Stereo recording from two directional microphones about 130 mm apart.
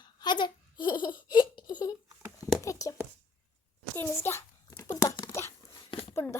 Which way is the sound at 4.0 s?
20° left (ahead or behind).